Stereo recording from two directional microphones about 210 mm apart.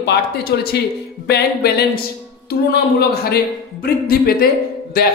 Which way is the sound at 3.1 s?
45° left (ahead or behind).